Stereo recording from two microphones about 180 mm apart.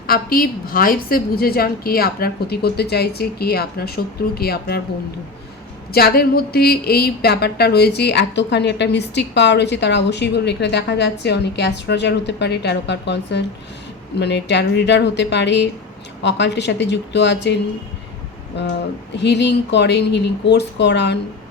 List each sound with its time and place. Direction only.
0.1 s a woman's voice: 55° left (ahead or behind)
5.9 s speech: 60° left (ahead or behind)